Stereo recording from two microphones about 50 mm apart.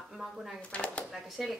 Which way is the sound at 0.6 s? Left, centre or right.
Left.